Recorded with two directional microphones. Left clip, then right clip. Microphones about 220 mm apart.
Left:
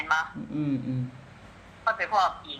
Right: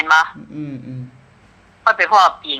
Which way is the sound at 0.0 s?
55° right (ahead or behind).